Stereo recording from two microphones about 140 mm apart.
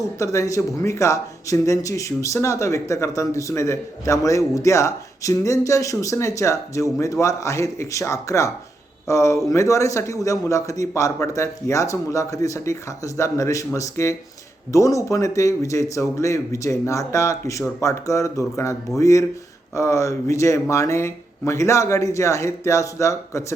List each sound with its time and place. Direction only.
0.2 s speech: 20° left (ahead or behind)